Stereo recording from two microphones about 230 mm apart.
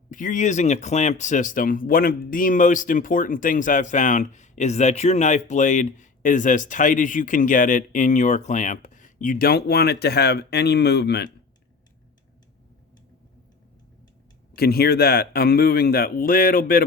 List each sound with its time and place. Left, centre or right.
0.1 s speech: left
14.5 s speech: left